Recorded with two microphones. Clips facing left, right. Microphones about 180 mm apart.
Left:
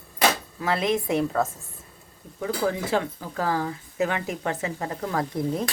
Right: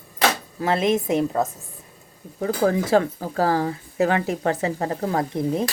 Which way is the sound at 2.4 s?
40° right (ahead or behind).